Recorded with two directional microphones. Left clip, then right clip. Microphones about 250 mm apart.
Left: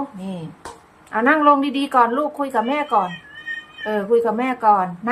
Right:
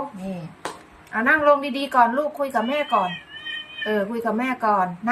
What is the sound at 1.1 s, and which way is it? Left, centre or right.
A woman's voice, centre.